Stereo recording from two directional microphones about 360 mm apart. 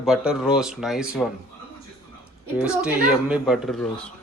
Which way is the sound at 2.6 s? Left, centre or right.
Centre.